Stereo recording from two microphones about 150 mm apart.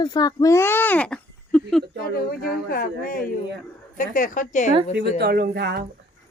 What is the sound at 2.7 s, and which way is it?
Speech, 70° left (ahead or behind).